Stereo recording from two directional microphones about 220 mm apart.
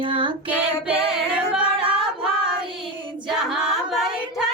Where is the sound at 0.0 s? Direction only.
20° right (ahead or behind).